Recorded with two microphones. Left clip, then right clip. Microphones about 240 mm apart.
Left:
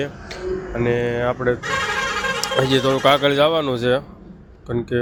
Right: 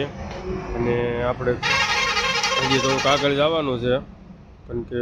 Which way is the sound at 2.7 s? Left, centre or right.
Left.